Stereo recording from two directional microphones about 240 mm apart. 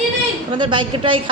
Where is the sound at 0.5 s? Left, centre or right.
Centre.